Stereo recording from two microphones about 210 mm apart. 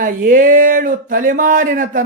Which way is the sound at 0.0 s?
40° right (ahead or behind).